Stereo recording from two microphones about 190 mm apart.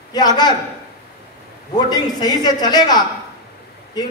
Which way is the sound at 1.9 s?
20° left (ahead or behind).